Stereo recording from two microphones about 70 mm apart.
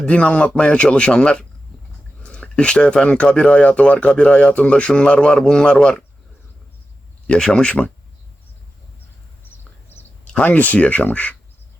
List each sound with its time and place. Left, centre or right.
0.0 s speech: centre
7.3 s speech: centre
9.9 s a sound: left
10.3 s speech: left